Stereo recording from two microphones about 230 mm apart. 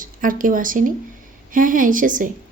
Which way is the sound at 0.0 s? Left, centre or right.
Right.